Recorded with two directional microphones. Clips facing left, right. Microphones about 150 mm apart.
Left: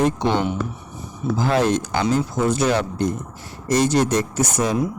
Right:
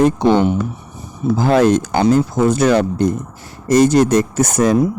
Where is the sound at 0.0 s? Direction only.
45° right (ahead or behind).